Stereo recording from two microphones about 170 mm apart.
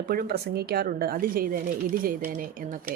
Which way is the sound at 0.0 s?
60° right (ahead or behind).